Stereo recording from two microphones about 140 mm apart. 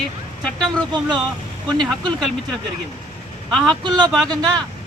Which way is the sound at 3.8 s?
30° right (ahead or behind).